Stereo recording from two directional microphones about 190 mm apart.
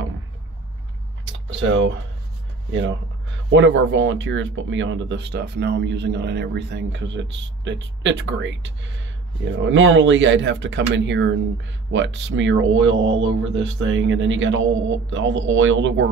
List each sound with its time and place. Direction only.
1.2 s a sound: 75° right (ahead or behind)
2.7 s speech: 75° right (ahead or behind)
9.4 s speech: 85° right